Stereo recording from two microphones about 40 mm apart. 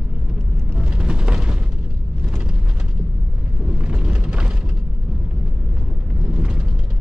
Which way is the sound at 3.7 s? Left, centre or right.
Right.